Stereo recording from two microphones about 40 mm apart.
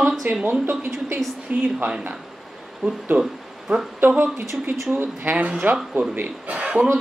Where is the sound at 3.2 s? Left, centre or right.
Centre.